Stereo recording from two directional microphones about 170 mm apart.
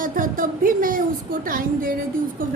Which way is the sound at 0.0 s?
55° right (ahead or behind).